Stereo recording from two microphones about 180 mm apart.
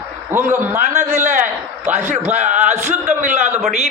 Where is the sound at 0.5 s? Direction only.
15° right (ahead or behind).